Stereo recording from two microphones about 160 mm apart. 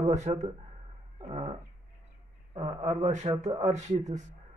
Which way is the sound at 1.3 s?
35° right (ahead or behind).